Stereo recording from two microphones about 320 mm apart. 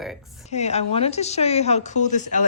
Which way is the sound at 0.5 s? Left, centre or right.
Centre.